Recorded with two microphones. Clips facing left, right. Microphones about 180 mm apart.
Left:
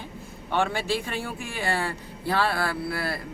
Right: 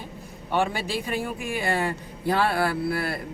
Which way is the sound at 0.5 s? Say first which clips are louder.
Even; 15° right (ahead or behind).